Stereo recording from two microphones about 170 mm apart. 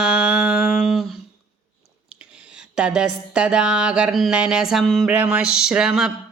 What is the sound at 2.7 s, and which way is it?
Speech, 5° right (ahead or behind).